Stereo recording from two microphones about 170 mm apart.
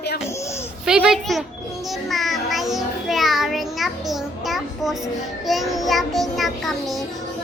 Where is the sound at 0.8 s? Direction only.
5° right (ahead or behind).